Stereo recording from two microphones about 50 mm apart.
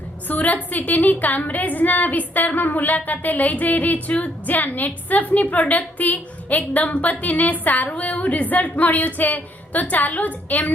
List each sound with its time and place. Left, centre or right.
0.3 s a woman's voice: left